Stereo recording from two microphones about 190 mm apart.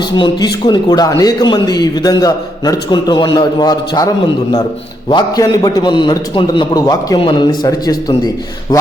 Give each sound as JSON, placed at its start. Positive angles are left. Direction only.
{"t": 0.2, "sound": "a man's voice", "side_deg": 25}